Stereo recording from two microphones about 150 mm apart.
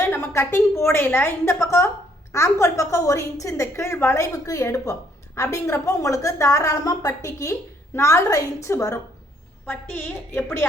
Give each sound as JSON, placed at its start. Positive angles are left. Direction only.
{"t": 0.0, "sound": "a woman's voice", "side_deg": 15}